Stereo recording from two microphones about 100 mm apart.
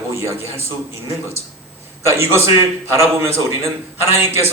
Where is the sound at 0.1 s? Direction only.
30° right (ahead or behind).